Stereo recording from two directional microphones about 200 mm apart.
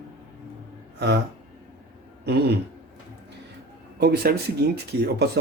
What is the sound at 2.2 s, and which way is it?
Speech, 55° right (ahead or behind).